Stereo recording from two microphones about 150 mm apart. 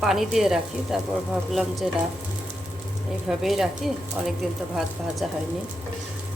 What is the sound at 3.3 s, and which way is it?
Speech, centre (ahead or behind).